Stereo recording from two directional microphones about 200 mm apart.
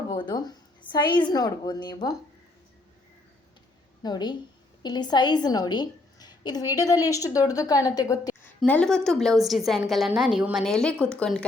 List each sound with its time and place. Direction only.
0.1 s a woman's voice: 20° left (ahead or behind)
4.0 s a woman's voice: 20° left (ahead or behind)
8.6 s a woman's voice: 5° left (ahead or behind)